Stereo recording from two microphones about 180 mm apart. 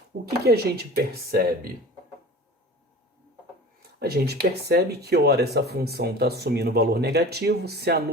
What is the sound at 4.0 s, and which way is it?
Speech, 60° right (ahead or behind).